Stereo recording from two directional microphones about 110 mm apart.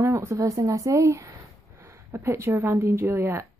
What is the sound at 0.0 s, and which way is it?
Speech, 25° right (ahead or behind).